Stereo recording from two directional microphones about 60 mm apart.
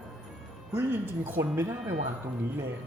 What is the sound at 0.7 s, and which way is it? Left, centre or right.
A man's voice, right.